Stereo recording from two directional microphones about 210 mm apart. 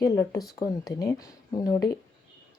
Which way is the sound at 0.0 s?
15° left (ahead or behind).